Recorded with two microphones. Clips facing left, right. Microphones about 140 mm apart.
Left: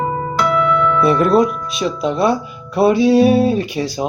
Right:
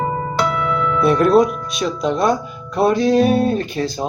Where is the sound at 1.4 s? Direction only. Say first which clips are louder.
Left 2 dB; 45° right (ahead or behind).